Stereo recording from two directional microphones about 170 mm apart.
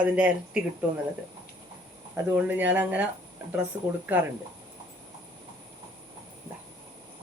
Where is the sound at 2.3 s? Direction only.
10° right (ahead or behind).